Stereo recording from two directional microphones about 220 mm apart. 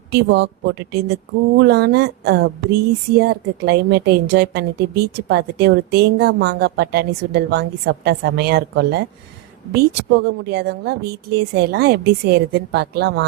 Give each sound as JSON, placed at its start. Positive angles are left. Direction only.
{"t": 0.1, "sound": "speech", "side_deg": -50}